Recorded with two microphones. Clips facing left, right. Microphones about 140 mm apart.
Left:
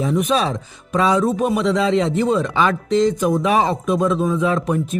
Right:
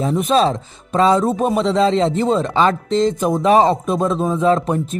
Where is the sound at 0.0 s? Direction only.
30° right (ahead or behind).